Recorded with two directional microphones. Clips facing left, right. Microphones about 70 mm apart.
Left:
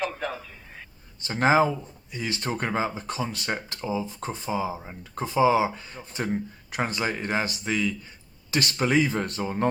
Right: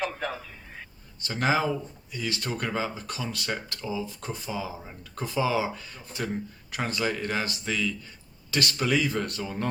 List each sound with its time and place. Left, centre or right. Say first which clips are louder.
1.2 s speech: left 5 dB; left